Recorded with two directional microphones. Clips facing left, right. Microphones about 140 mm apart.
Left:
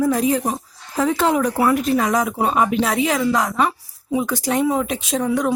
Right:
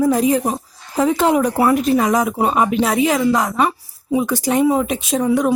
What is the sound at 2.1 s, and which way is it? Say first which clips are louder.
Speech: right 3 dB; 5° right (ahead or behind).